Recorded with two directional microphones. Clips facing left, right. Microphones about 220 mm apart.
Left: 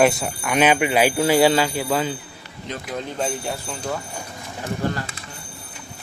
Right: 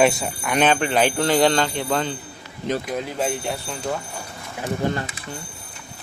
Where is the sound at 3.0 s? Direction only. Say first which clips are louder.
Right 1 dB; 5° right (ahead or behind).